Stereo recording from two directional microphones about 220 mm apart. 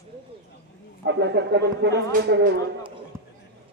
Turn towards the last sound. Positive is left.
turn(degrees=-10)  # may be behind; listen again after turning